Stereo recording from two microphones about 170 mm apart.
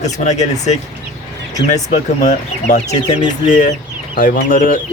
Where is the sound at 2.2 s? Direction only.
45° left (ahead or behind).